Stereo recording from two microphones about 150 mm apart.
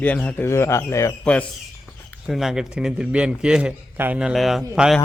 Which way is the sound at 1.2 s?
5° left (ahead or behind).